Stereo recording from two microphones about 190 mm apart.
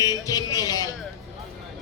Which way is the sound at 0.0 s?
20° left (ahead or behind).